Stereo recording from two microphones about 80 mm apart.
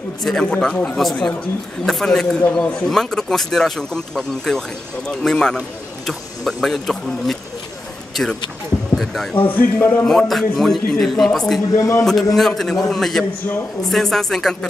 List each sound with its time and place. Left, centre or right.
0.2 s a man's voice: centre
9.5 s speech: left
10.0 s a man's voice: centre
11.7 s speech: left
12.0 s a man's voice: centre